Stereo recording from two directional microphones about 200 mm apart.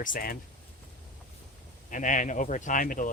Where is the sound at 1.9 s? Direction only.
40° left (ahead or behind).